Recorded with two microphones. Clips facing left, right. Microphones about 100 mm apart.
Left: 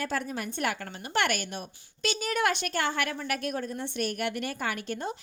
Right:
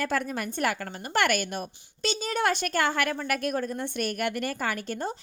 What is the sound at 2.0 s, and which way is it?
A woman's voice, 30° right (ahead or behind).